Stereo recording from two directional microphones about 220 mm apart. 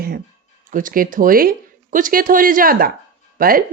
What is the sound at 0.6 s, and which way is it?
Speech, 40° right (ahead or behind).